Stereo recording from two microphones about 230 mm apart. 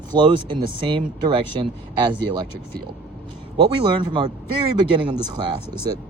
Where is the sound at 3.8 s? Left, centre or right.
Right.